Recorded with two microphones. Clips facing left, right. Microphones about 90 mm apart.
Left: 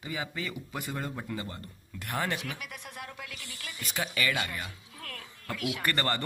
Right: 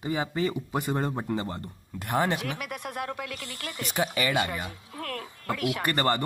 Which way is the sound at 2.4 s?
60° right (ahead or behind).